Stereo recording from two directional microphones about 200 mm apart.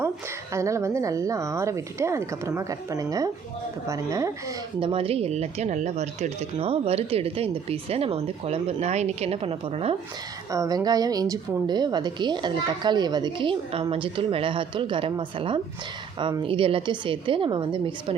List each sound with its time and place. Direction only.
0.5 s a woman's voice: 15° right (ahead or behind)
4.8 s speech: 25° right (ahead or behind)
10.5 s a woman's voice: 20° right (ahead or behind)